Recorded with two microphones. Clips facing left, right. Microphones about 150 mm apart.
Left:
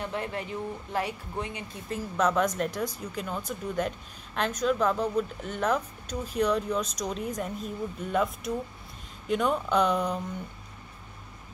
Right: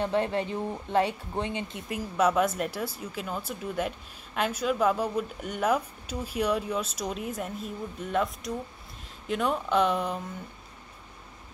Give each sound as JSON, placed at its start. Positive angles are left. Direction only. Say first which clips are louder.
{"t": 0.0, "sound": "speech", "louder": "right 6 dB", "side_deg": -30}
{"t": 1.9, "sound": "speech", "louder": "right 1 dB", "side_deg": -10}